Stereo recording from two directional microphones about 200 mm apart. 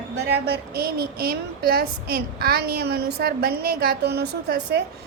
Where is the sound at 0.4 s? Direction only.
50° right (ahead or behind).